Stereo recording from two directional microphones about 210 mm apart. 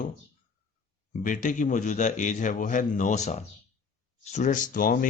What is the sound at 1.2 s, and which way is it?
Speech, 40° left (ahead or behind).